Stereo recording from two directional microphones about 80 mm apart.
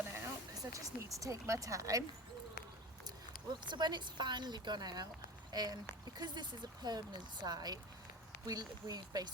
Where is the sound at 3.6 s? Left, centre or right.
Right.